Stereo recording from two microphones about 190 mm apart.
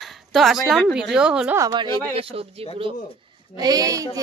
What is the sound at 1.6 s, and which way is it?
Speech, 25° right (ahead or behind).